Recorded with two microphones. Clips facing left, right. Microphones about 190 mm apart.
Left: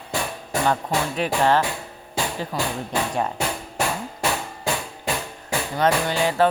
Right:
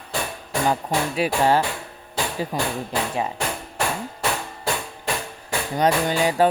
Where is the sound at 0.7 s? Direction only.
10° right (ahead or behind).